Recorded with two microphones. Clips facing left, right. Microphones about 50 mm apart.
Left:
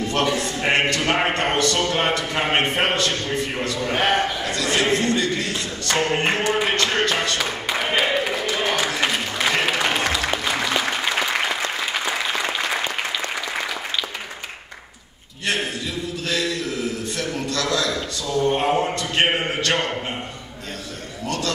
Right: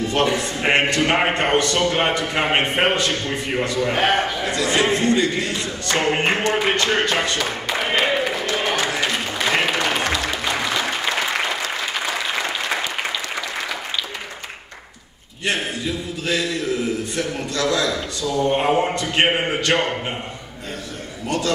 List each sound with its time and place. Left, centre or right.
0.1 s a man's voice: centre
4.5 s a man's voice: centre
6.7 s music: centre
7.3 s a sound: centre
9.7 s applause: centre
17.2 s a man's voice: centre